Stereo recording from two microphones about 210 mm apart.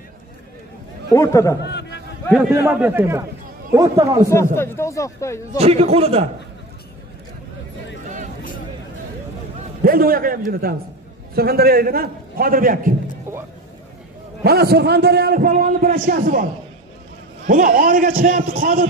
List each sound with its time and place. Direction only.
1.1 s speech: 15° left (ahead or behind)
1.6 s a sound: 55° left (ahead or behind)
2.3 s a man's voice: 10° right (ahead or behind)
4.6 s speech: 15° left (ahead or behind)
5.6 s a man's voice: 30° right (ahead or behind)
9.8 s a man's voice: 45° right (ahead or behind)
14.4 s a man's voice: 50° right (ahead or behind)
17.5 s a man's voice: 40° right (ahead or behind)